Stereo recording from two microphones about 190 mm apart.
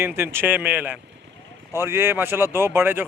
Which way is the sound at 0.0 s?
10° right (ahead or behind).